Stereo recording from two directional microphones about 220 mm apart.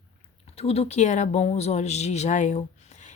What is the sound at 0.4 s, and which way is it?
A woman's voice, 25° left (ahead or behind).